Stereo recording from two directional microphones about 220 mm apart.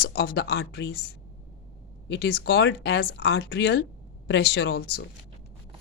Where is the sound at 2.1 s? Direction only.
45° left (ahead or behind).